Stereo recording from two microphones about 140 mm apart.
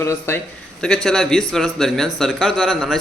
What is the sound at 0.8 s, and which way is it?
A man's voice, 5° left (ahead or behind).